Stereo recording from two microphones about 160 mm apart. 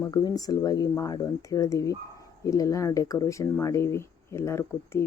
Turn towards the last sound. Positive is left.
turn(degrees=15)  # may be behind; listen again after turning